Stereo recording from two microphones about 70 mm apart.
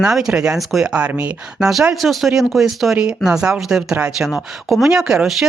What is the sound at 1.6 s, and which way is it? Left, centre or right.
Speech, centre.